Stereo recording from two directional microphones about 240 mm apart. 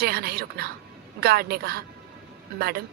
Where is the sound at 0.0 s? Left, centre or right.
Right.